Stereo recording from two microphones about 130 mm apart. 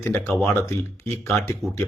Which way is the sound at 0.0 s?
20° left (ahead or behind).